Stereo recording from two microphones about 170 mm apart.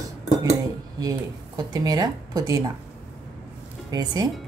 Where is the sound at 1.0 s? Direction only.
25° right (ahead or behind).